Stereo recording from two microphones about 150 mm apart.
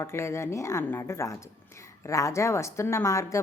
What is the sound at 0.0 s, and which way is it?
A woman's voice, 20° left (ahead or behind).